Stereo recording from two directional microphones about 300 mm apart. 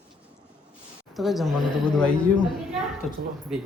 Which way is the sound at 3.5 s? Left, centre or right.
Centre.